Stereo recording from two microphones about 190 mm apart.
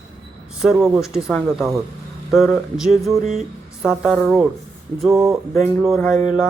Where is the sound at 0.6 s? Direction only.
Centre (ahead or behind).